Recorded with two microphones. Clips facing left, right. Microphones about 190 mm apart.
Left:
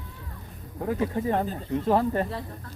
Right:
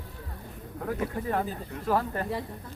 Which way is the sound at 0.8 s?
25° left (ahead or behind).